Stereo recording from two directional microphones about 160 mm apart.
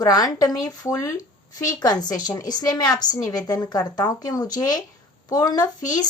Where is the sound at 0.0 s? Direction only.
25° left (ahead or behind).